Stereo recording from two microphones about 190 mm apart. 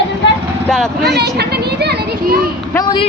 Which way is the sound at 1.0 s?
60° right (ahead or behind).